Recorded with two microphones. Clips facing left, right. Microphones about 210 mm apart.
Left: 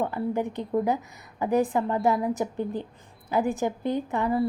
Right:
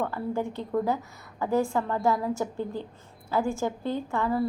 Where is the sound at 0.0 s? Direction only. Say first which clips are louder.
Left 2 dB; 15° left (ahead or behind).